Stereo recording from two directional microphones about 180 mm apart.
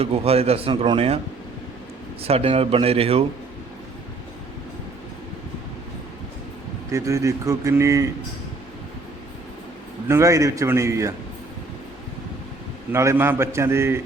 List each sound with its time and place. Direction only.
0.0 s a man's voice: 35° right (ahead or behind)
2.2 s a man's voice: 30° right (ahead or behind)
6.9 s speech: 15° right (ahead or behind)
10.1 s speech: 15° right (ahead or behind)
12.9 s speech: 15° right (ahead or behind)